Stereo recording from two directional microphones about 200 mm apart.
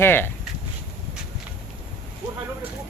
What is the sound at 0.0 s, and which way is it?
Speech, 10° left (ahead or behind).